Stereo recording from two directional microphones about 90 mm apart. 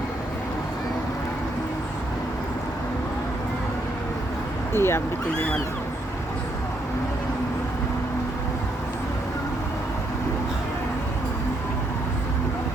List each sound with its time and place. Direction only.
4.7 s speech: 30° left (ahead or behind)